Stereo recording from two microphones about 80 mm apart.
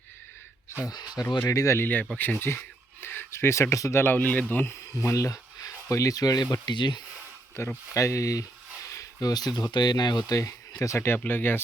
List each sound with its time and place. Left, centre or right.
0.9 s speech: left
1.5 s speech: left
2.1 s speech: left
5.0 s speech: left
7.6 s speech: left
8.9 s a sound: left
9.7 s speech: left
10.4 s speech: left